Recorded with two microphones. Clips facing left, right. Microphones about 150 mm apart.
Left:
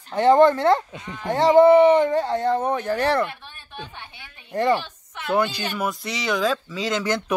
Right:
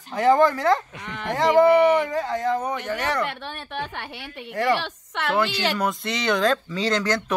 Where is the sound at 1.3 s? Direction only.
25° left (ahead or behind).